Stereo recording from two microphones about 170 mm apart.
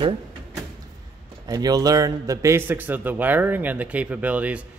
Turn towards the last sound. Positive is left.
turn(degrees=-10)  # may be behind; listen again after turning